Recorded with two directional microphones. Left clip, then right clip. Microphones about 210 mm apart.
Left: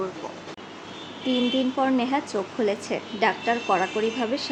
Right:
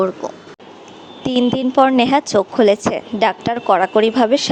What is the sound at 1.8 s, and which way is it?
A woman's voice, 45° right (ahead or behind).